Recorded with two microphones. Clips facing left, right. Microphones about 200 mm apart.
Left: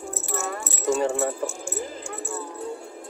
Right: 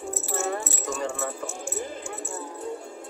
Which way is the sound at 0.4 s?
30° right (ahead or behind).